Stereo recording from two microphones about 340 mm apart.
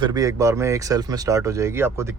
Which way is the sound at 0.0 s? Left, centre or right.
Centre.